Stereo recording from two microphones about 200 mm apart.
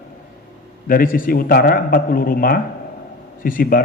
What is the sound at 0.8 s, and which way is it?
A man's voice, 45° left (ahead or behind).